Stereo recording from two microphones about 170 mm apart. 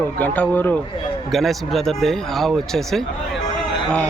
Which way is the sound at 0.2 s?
10° left (ahead or behind).